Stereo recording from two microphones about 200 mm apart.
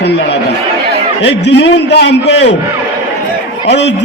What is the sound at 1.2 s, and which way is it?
A man's voice, 60° left (ahead or behind).